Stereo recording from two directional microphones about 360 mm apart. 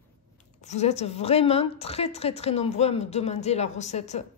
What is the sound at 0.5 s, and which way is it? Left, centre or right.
A woman's voice, centre.